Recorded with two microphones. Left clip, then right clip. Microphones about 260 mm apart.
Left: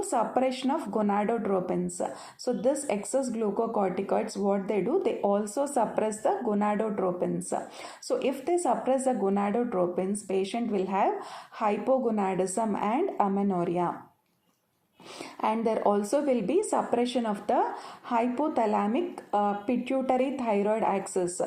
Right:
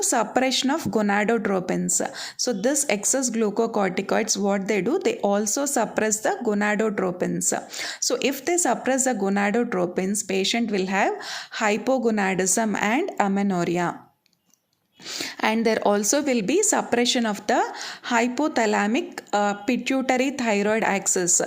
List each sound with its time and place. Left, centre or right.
0.1 s speech: right
15.4 s speech: right